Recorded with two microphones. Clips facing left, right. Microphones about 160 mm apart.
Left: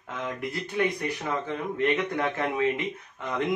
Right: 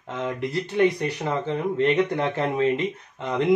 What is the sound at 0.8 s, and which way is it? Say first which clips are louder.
Speech: right 6 dB; 30° right (ahead or behind).